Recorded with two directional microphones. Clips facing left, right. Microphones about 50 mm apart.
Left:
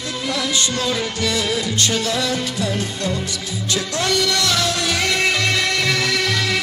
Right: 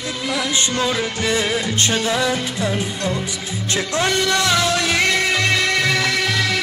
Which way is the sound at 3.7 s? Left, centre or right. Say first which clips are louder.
Right 1 dB; right.